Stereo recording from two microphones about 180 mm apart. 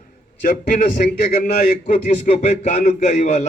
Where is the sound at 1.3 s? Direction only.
55° left (ahead or behind).